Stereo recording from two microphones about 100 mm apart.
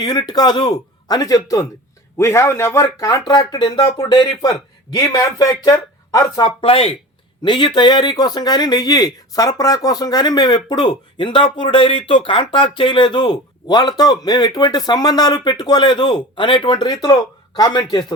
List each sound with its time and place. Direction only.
0.0 s a man's voice: 45° left (ahead or behind)
2.1 s speech: 25° left (ahead or behind)
6.4 s speech: 70° left (ahead or behind)
7.4 s a man's voice: 55° left (ahead or behind)